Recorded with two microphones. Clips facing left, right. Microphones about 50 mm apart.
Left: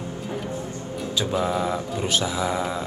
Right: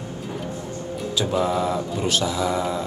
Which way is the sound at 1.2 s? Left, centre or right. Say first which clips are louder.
Right 2 dB; centre.